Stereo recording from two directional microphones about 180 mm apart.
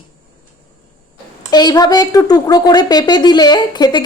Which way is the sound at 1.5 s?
20° left (ahead or behind).